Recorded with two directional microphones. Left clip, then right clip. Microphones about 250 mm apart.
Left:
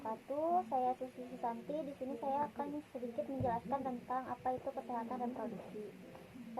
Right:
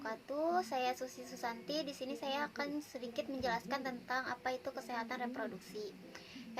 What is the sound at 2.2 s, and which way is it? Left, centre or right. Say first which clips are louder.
A woman's voice: left 1 dB; right.